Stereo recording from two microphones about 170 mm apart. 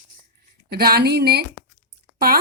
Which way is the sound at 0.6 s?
65° right (ahead or behind).